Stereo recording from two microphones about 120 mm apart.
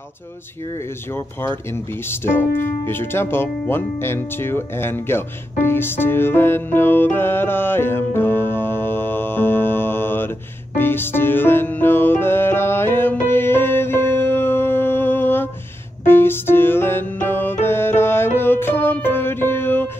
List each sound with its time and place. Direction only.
1.1 s speech: 20° left (ahead or behind)
10.8 s music: 20° left (ahead or behind)